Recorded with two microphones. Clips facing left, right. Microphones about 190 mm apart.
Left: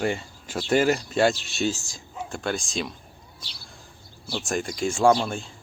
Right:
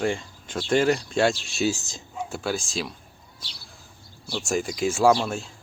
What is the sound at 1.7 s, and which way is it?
Speech, 20° right (ahead or behind).